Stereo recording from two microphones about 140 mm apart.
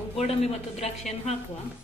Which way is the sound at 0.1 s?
45° left (ahead or behind).